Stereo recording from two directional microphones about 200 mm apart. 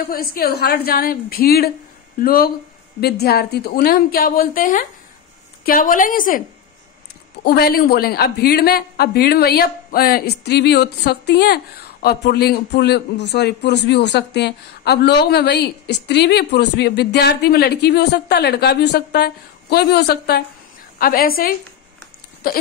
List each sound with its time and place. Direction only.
0.0 s a woman's voice: 50° left (ahead or behind)
7.4 s a woman's voice: 50° left (ahead or behind)